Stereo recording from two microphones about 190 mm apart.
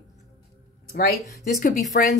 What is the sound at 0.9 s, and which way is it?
Speech, 55° left (ahead or behind).